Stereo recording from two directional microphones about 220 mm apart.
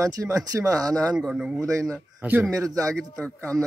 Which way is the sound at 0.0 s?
15° right (ahead or behind).